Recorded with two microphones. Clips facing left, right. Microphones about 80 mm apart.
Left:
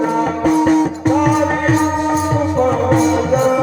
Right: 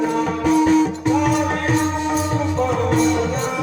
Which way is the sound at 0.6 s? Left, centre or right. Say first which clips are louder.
Left 3 dB; left.